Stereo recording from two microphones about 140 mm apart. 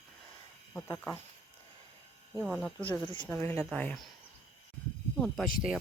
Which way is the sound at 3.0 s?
35° left (ahead or behind).